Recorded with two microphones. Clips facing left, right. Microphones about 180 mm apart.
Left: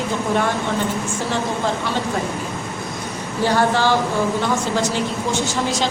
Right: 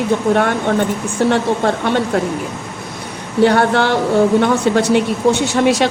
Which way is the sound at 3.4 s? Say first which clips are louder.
Right 4 dB; 65° right (ahead or behind).